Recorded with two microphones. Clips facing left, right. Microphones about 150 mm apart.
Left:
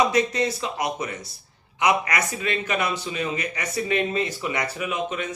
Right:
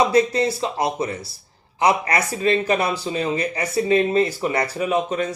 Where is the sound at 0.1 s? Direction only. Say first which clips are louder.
Right 5 dB; 30° right (ahead or behind).